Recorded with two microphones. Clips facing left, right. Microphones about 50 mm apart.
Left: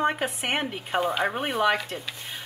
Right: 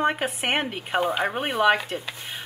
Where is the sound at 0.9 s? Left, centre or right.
Centre.